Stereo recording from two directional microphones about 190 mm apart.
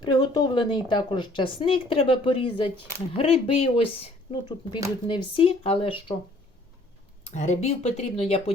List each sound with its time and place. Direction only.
0.0 s speech: 20° left (ahead or behind)
7.3 s speech: 40° left (ahead or behind)